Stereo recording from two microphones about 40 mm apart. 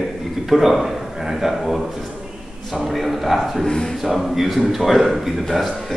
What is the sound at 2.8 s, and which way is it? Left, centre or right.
Speech, centre.